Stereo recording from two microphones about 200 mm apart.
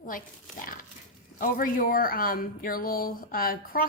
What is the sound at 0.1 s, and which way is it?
A woman's voice, 45° left (ahead or behind).